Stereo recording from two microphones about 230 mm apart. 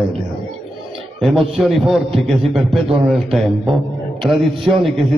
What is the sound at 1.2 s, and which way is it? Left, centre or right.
A man's voice, centre.